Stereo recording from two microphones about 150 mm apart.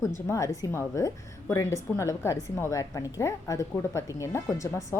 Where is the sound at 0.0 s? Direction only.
20° left (ahead or behind).